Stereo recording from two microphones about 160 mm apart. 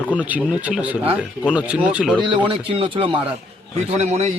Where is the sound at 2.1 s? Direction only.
30° right (ahead or behind).